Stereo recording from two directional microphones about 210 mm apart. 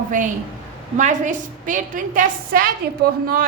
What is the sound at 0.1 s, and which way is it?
A woman's voice, 40° right (ahead or behind).